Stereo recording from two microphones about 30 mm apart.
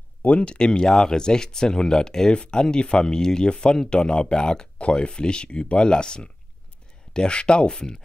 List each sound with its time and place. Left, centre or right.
0.4 s speech: left
4.7 s speech: left